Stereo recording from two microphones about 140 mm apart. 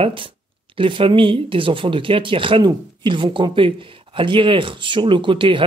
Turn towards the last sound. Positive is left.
turn(degrees=-35)  # may be behind; listen again after turning